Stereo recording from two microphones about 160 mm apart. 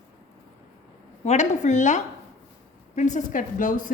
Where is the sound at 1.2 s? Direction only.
45° left (ahead or behind).